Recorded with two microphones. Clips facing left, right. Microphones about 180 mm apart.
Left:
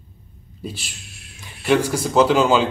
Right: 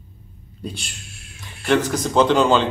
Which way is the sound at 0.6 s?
5° left (ahead or behind).